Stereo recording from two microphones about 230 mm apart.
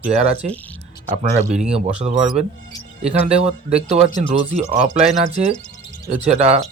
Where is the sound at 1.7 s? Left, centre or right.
Right.